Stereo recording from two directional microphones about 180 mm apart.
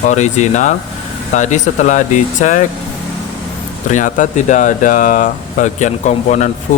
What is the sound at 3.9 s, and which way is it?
Speech, 45° left (ahead or behind).